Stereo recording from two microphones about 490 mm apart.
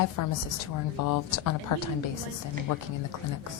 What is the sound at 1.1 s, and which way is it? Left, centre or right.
Speech, left.